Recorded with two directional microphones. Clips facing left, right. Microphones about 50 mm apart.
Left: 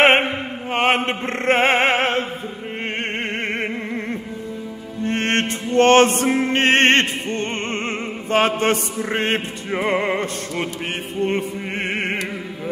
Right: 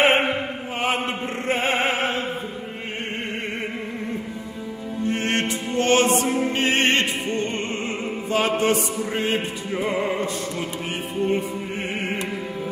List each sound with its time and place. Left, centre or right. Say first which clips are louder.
0.7 s opera: left 6 dB; left
3.4 s music: left 5 dB; left
5.0 s music: left 3 dB; left
11.2 s music: left 1 dB; left